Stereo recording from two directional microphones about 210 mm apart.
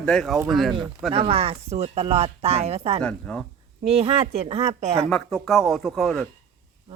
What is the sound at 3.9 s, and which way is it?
Speech, 30° right (ahead or behind).